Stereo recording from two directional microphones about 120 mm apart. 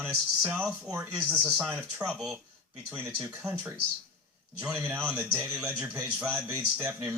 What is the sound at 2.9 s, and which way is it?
Speech, 20° right (ahead or behind).